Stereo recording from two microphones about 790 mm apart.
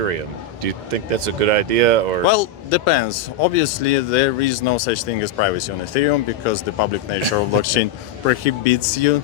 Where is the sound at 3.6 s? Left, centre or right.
Left.